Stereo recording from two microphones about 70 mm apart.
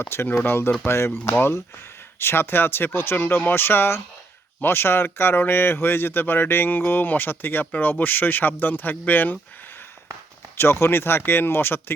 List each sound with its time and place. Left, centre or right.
0.0 s speech: left
10.6 s speech: left